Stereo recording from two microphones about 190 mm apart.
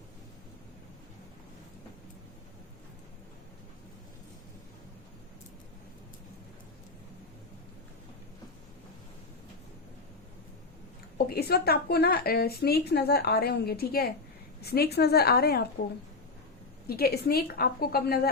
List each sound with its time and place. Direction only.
11.3 s a woman's voice: 55° left (ahead or behind)
16.8 s a woman's voice: 55° left (ahead or behind)